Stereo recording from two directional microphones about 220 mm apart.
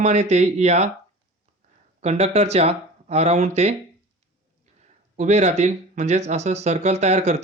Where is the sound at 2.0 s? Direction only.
30° right (ahead or behind).